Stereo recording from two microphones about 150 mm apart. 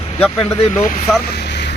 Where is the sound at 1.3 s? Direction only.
90° left.